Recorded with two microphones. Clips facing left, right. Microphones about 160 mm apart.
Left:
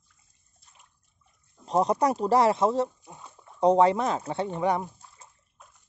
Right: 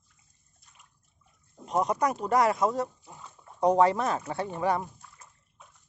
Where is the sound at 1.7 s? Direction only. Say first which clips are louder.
Left 3 dB; 30° left (ahead or behind).